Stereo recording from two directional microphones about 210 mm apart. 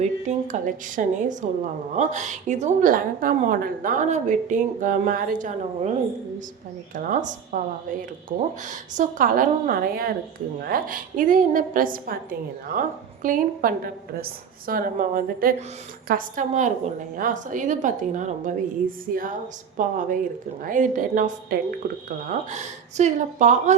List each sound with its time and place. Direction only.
0.0 s a woman's voice: 35° right (ahead or behind)
6.9 s a woman's voice: 40° right (ahead or behind)
9.0 s a woman's voice: 40° right (ahead or behind)